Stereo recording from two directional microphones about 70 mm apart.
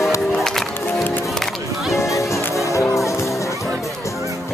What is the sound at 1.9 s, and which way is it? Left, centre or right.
Music, left.